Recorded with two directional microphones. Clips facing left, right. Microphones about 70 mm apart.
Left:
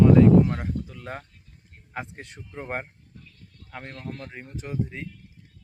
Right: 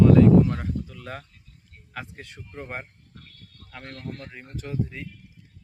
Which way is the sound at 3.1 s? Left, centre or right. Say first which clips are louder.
Right 1 dB; right.